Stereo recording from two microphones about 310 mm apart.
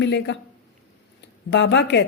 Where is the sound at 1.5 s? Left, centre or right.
Left.